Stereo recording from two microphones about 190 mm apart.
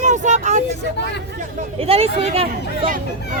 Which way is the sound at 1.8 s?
30° right (ahead or behind).